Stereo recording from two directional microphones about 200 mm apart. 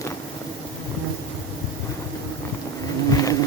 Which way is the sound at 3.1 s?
15° left (ahead or behind).